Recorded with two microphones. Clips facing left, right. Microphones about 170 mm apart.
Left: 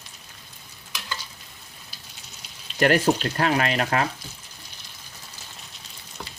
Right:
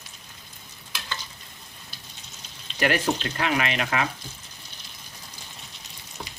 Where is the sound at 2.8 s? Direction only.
40° left (ahead or behind).